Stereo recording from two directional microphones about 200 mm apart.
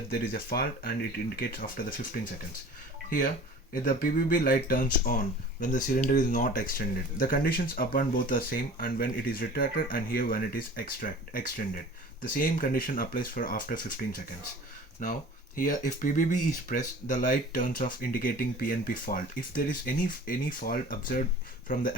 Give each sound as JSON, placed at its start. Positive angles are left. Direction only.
{"t": 0.1, "sound": "speech", "side_deg": 50}